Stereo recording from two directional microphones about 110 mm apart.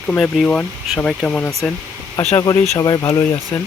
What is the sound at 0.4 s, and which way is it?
Speech, 15° left (ahead or behind).